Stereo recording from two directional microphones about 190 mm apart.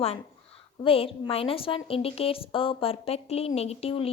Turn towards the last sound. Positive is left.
turn(degrees=30)  # may be behind; listen again after turning